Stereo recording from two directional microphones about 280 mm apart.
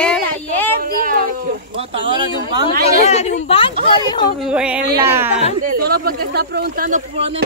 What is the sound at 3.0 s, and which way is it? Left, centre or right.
A woman's voice, left.